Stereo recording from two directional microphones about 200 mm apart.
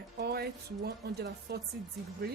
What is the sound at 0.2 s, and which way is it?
Speech, 50° right (ahead or behind).